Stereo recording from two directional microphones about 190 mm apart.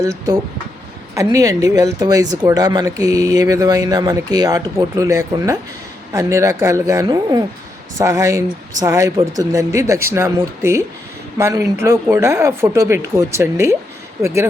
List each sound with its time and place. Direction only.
1.1 s speech: 15° right (ahead or behind)